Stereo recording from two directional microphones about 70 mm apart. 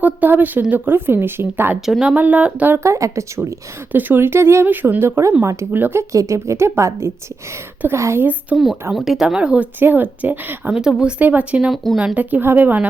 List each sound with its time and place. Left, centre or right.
0.0 s a woman's voice: right
2.8 s a woman's voice: right
3.9 s a woman's voice: right
4.6 s a woman's voice: right
5.7 s speech: right
6.0 s a woman's voice: right
8.2 s speech: right
8.9 s speech: centre
9.8 s speech: right
10.7 s speech: centre
11.2 s speech: right
11.7 s speech: centre
12.1 s speech: right